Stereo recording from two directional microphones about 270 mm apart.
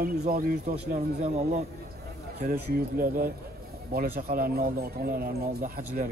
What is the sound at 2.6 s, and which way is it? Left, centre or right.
Speech, right.